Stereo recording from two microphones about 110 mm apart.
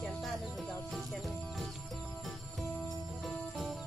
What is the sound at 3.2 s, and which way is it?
Music, centre (ahead or behind).